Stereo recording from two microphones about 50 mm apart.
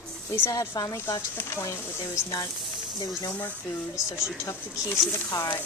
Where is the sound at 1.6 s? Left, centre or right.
Left.